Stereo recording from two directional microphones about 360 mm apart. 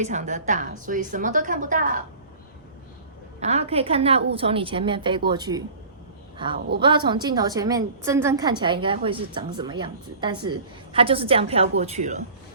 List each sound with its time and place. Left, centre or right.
0.0 s a woman's voice: centre
3.4 s a woman's voice: centre